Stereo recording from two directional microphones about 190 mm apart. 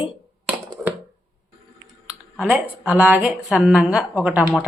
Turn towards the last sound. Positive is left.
turn(degrees=-5)  # may be behind; listen again after turning